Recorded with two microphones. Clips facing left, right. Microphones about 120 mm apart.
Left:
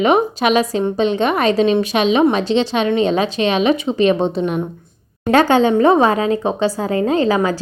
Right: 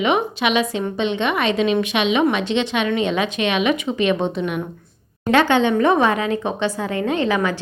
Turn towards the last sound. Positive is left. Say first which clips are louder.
# left 4 dB
turn(degrees=35)  # may be behind; listen again after turning